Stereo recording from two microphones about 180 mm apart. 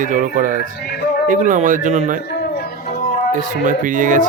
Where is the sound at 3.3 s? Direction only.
45° right (ahead or behind).